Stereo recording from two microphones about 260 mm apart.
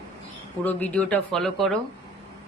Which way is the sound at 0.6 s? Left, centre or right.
Centre.